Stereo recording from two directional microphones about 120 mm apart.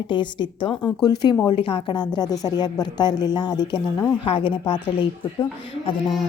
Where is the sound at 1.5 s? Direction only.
45° left (ahead or behind).